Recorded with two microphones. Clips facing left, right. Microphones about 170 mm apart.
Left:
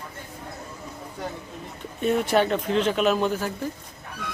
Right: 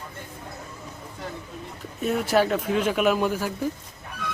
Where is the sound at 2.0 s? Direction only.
Centre (ahead or behind).